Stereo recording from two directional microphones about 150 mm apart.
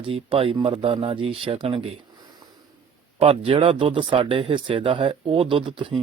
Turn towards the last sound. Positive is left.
turn(degrees=-35)  # may be behind; listen again after turning